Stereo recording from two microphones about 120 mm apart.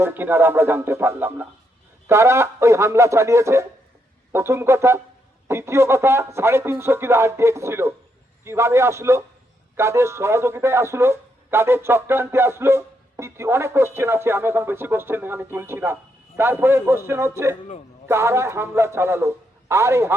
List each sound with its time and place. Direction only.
0.0 s a man's voice: 20° right (ahead or behind)